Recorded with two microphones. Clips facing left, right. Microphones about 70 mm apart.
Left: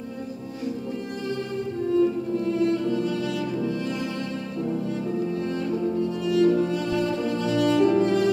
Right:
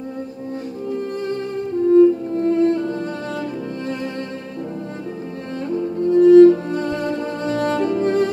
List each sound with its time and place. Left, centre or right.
1.9 s music: right
6.0 s music: right